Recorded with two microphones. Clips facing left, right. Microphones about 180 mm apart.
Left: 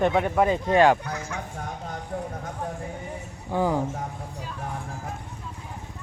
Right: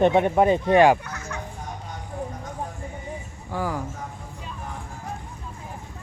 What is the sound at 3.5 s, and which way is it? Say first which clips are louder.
Speech: left 4 dB; 20° left (ahead or behind).